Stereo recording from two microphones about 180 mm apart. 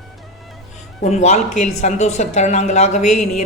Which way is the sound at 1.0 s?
40° left (ahead or behind).